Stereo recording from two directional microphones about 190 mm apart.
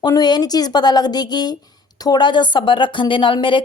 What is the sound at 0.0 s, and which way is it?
Speech, 20° left (ahead or behind).